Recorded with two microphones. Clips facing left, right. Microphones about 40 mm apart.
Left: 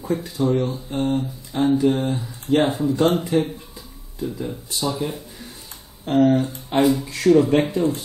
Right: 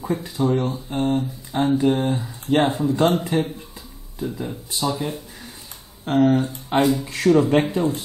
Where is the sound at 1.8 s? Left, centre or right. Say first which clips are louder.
Even; right.